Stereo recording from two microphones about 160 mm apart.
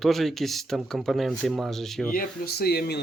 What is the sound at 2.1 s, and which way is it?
Speech, 65° left (ahead or behind).